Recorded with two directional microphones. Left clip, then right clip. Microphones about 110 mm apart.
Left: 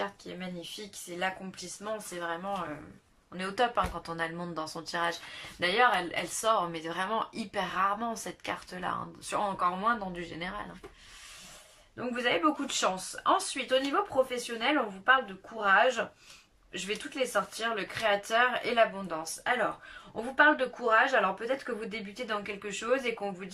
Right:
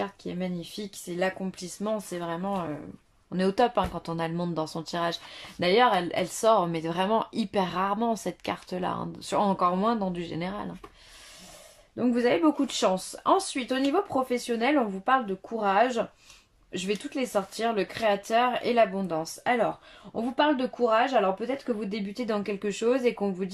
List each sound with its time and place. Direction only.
0.0 s a sound: 45° right (ahead or behind)
1.2 s speech: 40° right (ahead or behind)
11.9 s speech: 50° right (ahead or behind)